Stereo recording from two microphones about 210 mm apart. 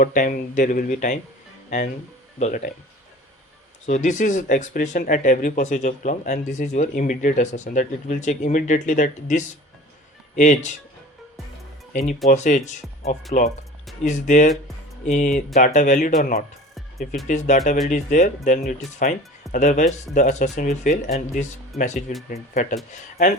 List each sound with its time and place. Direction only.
0.0 s speech: 40° left (ahead or behind)
3.8 s speech: 35° left (ahead or behind)
11.9 s speech: 35° left (ahead or behind)
21.7 s speech: centre (ahead or behind)
22.3 s speech: 35° left (ahead or behind)